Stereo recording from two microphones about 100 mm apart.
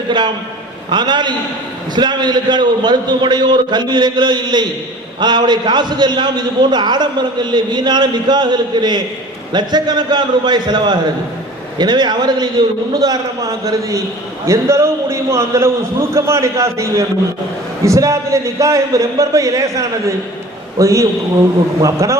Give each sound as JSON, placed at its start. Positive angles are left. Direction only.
{"t": 0.9, "sound": "a man's voice", "side_deg": -50}